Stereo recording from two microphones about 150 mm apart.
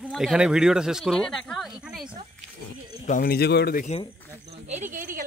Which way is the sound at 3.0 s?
75° left (ahead or behind).